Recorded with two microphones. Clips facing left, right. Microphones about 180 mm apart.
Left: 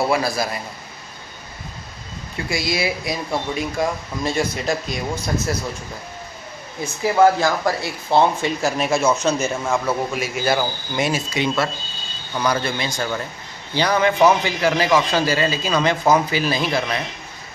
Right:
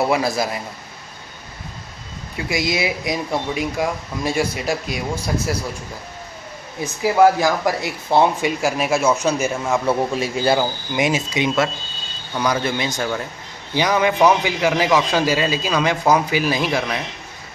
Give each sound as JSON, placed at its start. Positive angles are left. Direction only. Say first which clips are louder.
{"t": 0.0, "sound": "a man's voice", "louder": "right 1 dB", "side_deg": -20}
{"t": 2.3, "sound": "speech", "louder": "right 2 dB", "side_deg": -20}
{"t": 6.8, "sound": "speech", "louder": "right 1 dB", "side_deg": -15}
{"t": 10.1, "sound": "a man's voice", "louder": "right 3 dB", "side_deg": -30}
{"t": 10.6, "sound": "speech", "louder": "right 2 dB", "side_deg": -15}
{"t": 12.9, "sound": "a man's voice", "louder": "right 1 dB", "side_deg": 0}
{"t": 13.7, "sound": "speech", "louder": "even", "side_deg": -15}